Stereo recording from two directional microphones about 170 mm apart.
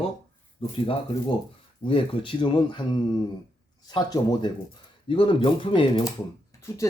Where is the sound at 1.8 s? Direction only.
30° left (ahead or behind).